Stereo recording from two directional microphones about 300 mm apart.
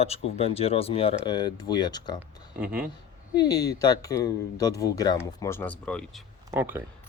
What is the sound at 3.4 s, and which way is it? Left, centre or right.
Speech, centre.